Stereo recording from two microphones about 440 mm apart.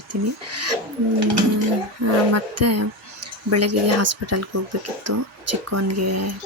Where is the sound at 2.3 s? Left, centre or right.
Right.